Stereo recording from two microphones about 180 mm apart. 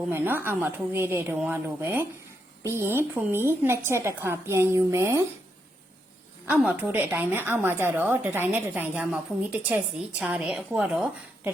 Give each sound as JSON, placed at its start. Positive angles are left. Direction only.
{"t": 0.1, "sound": "a woman's voice", "side_deg": -10}
{"t": 6.5, "sound": "a woman's voice", "side_deg": -10}